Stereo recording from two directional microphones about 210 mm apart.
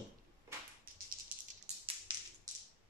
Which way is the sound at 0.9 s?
45° right (ahead or behind).